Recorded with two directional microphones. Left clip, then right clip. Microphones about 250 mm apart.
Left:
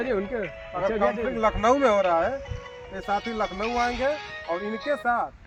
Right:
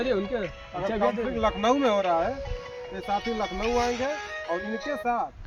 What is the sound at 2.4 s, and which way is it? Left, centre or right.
Speech, right.